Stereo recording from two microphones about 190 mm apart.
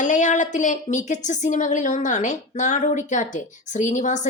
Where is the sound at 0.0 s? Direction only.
40° left (ahead or behind).